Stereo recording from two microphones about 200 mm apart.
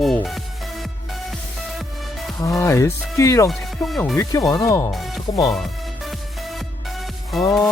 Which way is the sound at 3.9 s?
Centre (ahead or behind).